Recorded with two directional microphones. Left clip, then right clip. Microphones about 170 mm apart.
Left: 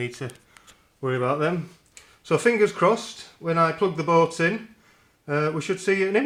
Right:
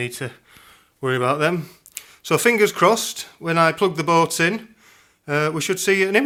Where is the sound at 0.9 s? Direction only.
25° right (ahead or behind).